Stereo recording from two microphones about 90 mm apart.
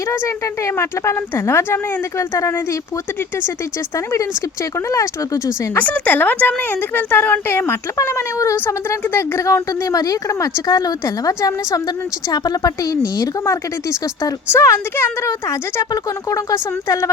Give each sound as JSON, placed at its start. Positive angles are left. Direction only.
{"t": 0.1, "sound": "a woman's voice", "side_deg": 35}
{"t": 3.9, "sound": "a woman's voice", "side_deg": 35}
{"t": 5.7, "sound": "a woman's voice", "side_deg": 20}